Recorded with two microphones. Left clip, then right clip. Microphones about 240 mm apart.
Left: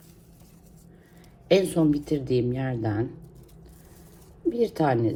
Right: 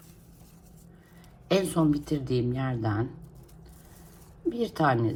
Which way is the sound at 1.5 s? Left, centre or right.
Right.